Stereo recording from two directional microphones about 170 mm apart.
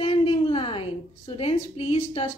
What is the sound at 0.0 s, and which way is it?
A woman's voice, 35° left (ahead or behind).